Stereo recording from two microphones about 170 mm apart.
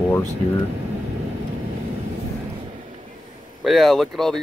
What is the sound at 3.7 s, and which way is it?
Speech, centre (ahead or behind).